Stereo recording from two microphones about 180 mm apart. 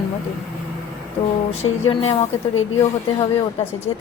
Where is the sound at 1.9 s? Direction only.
30° left (ahead or behind).